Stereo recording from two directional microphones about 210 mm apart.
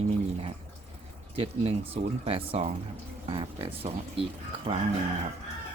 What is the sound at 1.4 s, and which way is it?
Speech, 25° right (ahead or behind).